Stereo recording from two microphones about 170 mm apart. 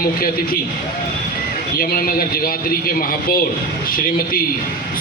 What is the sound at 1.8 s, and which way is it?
A man's voice, 60° left (ahead or behind).